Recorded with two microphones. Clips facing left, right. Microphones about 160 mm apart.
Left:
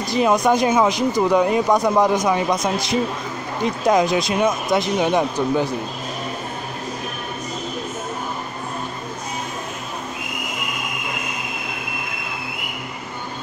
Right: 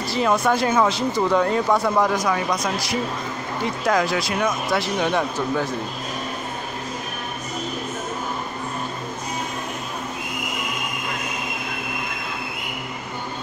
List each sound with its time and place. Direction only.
0.0 s speech: 15° left (ahead or behind)